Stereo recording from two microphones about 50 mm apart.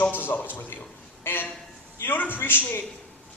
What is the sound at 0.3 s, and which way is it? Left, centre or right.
Speech, left.